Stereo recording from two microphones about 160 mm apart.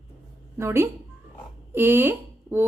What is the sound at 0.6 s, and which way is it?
Speech, 15° right (ahead or behind).